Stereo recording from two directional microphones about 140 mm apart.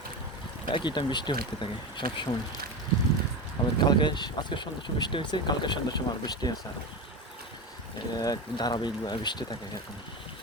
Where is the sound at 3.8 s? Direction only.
30° left (ahead or behind).